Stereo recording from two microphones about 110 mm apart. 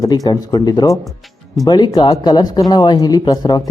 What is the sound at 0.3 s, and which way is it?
Speech, 35° left (ahead or behind).